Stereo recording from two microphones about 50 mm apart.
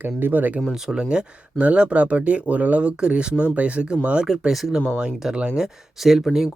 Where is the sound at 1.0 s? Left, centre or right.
Right.